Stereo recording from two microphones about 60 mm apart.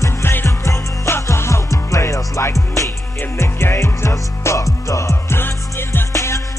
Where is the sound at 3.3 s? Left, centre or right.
Left.